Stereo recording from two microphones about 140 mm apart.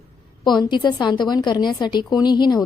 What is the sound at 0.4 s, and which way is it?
A woman's voice, 30° left (ahead or behind).